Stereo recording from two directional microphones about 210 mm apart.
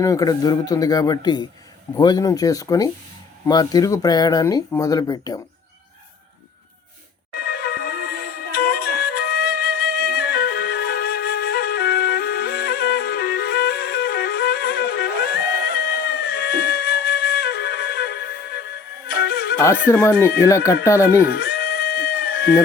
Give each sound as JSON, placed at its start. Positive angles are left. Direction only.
{"t": 0.0, "sound": "speech", "side_deg": 15}
{"t": 7.3, "sound": "music", "side_deg": 45}
{"t": 19.9, "sound": "speech", "side_deg": 10}
{"t": 21.2, "sound": "bleat", "side_deg": 45}